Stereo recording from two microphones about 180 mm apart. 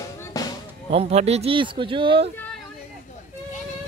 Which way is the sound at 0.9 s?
35° right (ahead or behind).